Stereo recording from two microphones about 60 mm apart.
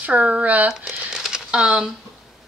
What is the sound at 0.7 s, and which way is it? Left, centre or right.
Speech, centre.